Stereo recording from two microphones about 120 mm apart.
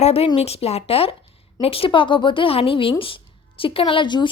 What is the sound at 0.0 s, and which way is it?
Speech, 55° left (ahead or behind).